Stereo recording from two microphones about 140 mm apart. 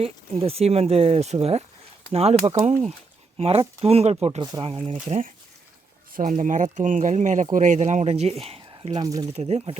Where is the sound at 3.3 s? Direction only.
45° right (ahead or behind).